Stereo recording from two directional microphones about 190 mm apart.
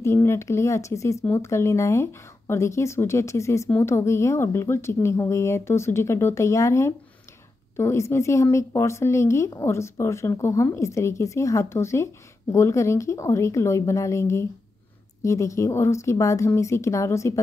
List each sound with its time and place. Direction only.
0.0 s speech: 15° left (ahead or behind)